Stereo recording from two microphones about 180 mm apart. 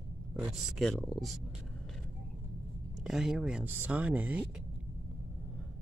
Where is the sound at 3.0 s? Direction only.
Centre (ahead or behind).